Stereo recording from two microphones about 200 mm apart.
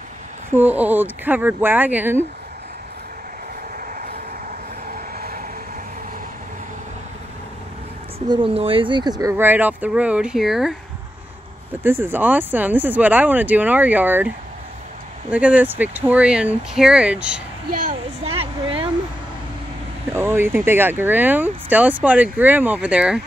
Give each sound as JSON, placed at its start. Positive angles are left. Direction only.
{"t": 0.5, "sound": "speech", "side_deg": -10}
{"t": 4.8, "sound": "vehicle", "side_deg": -45}
{"t": 8.3, "sound": "speech", "side_deg": -25}
{"t": 11.8, "sound": "speech", "side_deg": -10}
{"t": 15.3, "sound": "speech", "side_deg": -5}
{"t": 17.6, "sound": "a woman's voice", "side_deg": -45}
{"t": 18.2, "sound": "a sound", "side_deg": -30}
{"t": 20.1, "sound": "speech", "side_deg": -10}